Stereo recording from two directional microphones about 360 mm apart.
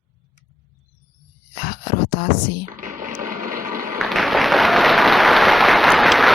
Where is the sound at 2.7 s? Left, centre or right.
Right.